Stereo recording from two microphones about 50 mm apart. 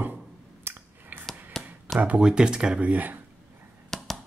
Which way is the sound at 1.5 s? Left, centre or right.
Centre.